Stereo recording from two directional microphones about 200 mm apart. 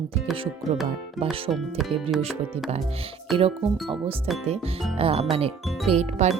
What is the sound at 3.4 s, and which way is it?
Speech, 30° right (ahead or behind).